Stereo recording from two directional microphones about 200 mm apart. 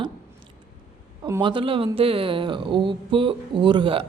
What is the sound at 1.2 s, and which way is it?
Speech, 15° right (ahead or behind).